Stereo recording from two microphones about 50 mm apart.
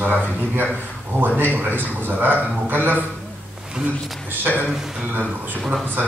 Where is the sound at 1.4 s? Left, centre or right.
Right.